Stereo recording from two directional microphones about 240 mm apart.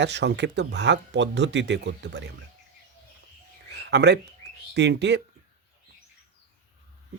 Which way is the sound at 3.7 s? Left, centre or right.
Right.